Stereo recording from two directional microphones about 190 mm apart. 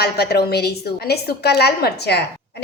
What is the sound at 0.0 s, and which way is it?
A woman's voice, 55° left (ahead or behind).